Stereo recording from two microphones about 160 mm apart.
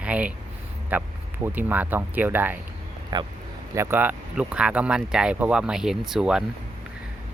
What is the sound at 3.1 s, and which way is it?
Speech, 25° right (ahead or behind).